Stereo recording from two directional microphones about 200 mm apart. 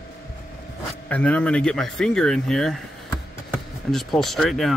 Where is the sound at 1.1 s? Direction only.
5° left (ahead or behind).